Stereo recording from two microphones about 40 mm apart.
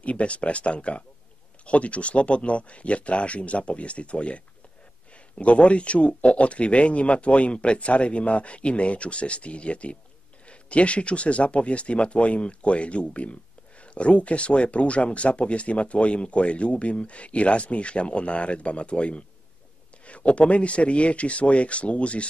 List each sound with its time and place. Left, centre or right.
0.0 s speech: left